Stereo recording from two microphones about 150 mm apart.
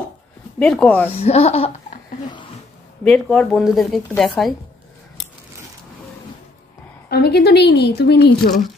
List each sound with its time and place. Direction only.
0.6 s speech: 5° left (ahead or behind)
1.1 s speech: 45° left (ahead or behind)
3.0 s speech: 5° left (ahead or behind)
7.1 s speech: 90° left